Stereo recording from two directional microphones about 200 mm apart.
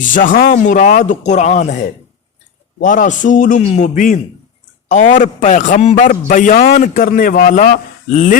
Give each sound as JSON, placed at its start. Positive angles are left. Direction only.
{"t": 0.0, "sound": "a man's voice", "side_deg": 40}